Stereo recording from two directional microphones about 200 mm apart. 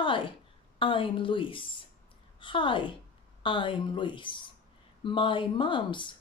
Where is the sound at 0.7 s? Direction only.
25° left (ahead or behind).